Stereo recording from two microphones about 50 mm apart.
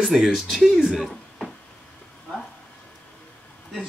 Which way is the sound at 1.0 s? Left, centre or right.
Centre.